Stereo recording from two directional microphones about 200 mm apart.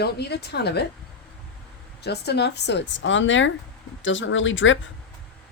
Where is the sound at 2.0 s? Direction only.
55° left (ahead or behind).